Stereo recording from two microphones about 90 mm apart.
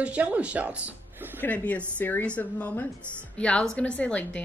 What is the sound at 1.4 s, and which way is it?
Speech, 15° left (ahead or behind).